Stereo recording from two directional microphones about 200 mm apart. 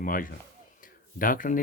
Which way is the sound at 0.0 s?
45° left (ahead or behind).